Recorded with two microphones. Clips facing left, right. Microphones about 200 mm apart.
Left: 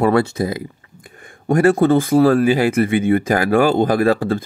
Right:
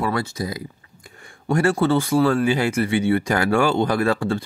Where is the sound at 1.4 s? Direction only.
55° left (ahead or behind).